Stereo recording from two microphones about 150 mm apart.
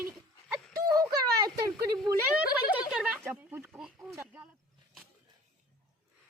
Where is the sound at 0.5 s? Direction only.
25° right (ahead or behind).